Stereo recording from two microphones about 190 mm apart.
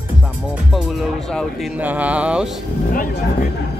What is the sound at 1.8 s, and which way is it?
Speech, 10° right (ahead or behind).